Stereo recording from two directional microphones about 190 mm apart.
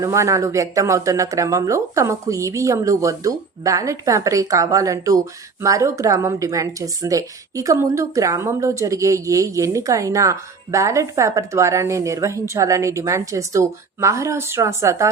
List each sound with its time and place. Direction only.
0.0 s speech: 15° right (ahead or behind)